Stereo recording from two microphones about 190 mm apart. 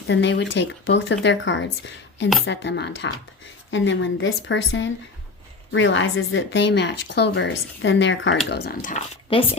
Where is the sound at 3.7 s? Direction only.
80° left; by 8.9 s 55° left (ahead or behind).